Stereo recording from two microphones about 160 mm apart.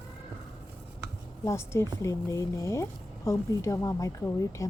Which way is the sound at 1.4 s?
15° left (ahead or behind).